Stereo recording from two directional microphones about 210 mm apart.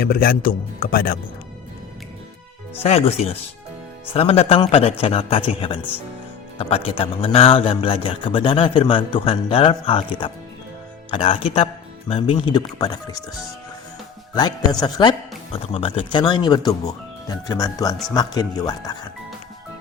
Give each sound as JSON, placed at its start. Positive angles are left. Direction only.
{"t": 0.0, "sound": "speech", "side_deg": 45}
{"t": 2.8, "sound": "a man's voice", "side_deg": 30}
{"t": 14.3, "sound": "a man's voice", "side_deg": 20}